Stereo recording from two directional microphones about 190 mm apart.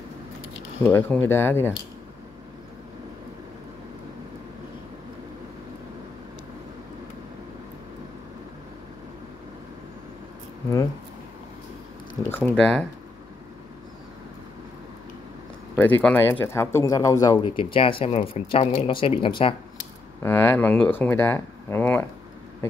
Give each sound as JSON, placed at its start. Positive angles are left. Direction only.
{"t": 0.8, "sound": "speech", "side_deg": 10}
{"t": 12.3, "sound": "speech", "side_deg": 5}
{"t": 15.7, "sound": "speech", "side_deg": 10}
{"t": 20.2, "sound": "speech", "side_deg": 10}